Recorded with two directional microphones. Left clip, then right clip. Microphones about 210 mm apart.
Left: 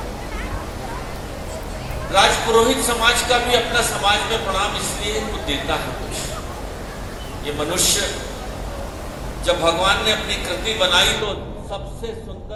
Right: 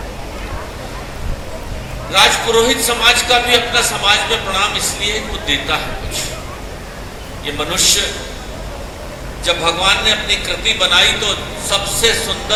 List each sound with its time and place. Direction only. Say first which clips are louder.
2.1 s a man's voice: right 3 dB; 25° right (ahead or behind)
7.4 s a man's voice: right 5 dB; 25° right (ahead or behind)
9.4 s a man's voice: right 3 dB; 25° right (ahead or behind)